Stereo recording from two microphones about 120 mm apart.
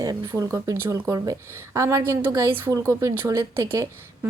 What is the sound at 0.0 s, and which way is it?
A woman's voice, 30° right (ahead or behind).